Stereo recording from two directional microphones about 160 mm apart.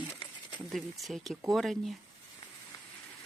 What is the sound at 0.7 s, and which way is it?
Speech, centre (ahead or behind).